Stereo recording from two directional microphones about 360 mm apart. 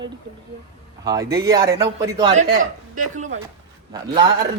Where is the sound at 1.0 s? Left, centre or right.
Centre.